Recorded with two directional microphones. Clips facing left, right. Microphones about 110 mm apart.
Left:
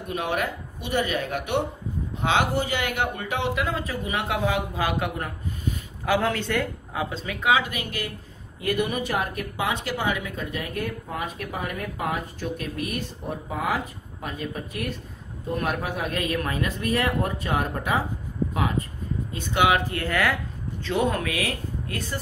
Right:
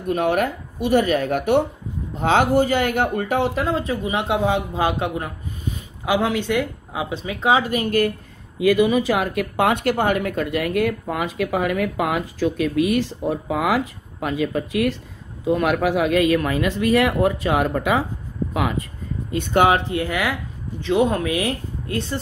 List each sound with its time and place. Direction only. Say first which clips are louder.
0.1 s speech: right 7 dB; 45° right (ahead or behind)
3.7 s speech: right 6 dB; 25° right (ahead or behind); by 8.1 s 45° right (ahead or behind)
8.5 s speech: right 9 dB; 90° right
19.5 s speech: right 5 dB; 40° right (ahead or behind)
19.9 s speech: right 2 dB; 15° right (ahead or behind)